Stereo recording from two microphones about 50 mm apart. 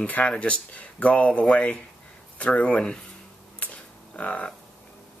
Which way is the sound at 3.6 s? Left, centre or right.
Left.